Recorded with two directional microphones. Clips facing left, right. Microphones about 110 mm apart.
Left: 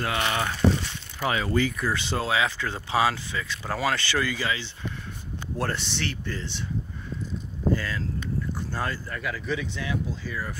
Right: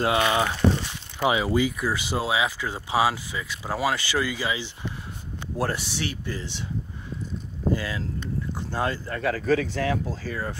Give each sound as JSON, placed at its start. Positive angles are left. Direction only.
{"t": 0.0, "sound": "speech", "side_deg": -20}
{"t": 7.7, "sound": "speech", "side_deg": -15}
{"t": 9.1, "sound": "speech", "side_deg": -40}